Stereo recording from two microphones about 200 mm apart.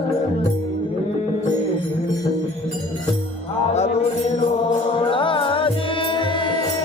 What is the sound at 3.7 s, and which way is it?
Music, 35° left (ahead or behind).